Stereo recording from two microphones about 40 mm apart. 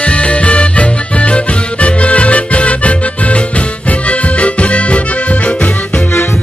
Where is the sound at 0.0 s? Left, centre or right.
Left.